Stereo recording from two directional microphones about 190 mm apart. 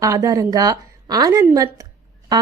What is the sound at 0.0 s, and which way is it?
A woman's voice, 15° right (ahead or behind).